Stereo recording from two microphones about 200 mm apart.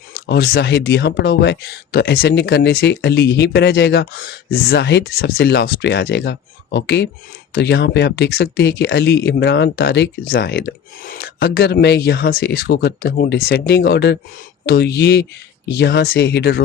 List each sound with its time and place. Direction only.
0.1 s speech: 50° left (ahead or behind)